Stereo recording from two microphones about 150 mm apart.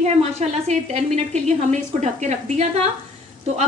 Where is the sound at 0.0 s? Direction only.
45° right (ahead or behind).